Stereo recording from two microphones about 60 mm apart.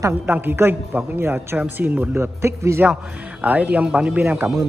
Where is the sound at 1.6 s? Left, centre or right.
Right.